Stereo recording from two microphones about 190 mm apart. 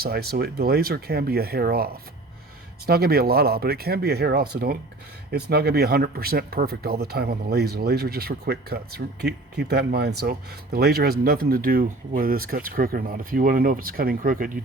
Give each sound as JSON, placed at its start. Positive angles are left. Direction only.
{"t": 0.0, "sound": "speech", "side_deg": -55}